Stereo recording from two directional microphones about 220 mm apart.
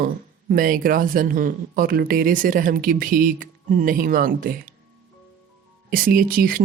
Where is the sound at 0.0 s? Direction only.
40° right (ahead or behind).